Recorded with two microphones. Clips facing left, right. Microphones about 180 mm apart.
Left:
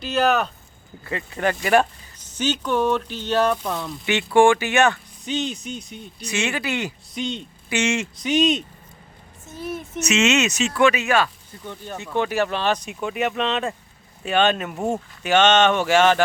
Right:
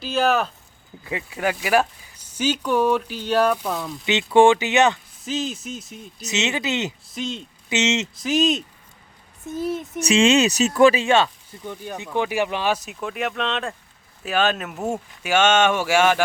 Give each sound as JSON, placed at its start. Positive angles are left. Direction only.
{"t": 0.0, "sound": "speech", "side_deg": 0}
{"t": 4.0, "sound": "speech", "side_deg": -20}
{"t": 5.2, "sound": "speech", "side_deg": 0}
{"t": 6.2, "sound": "speech", "side_deg": -20}
{"t": 7.1, "sound": "speech", "side_deg": 0}
{"t": 7.7, "sound": "speech", "side_deg": -20}
{"t": 8.1, "sound": "speech", "side_deg": 0}
{"t": 9.6, "sound": "speech", "side_deg": -30}
{"t": 11.6, "sound": "speech", "side_deg": -10}